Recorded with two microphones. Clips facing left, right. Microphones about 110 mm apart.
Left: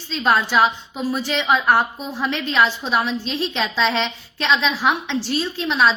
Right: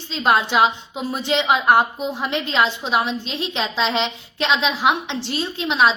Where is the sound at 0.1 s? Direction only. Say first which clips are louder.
Even; 20° right (ahead or behind).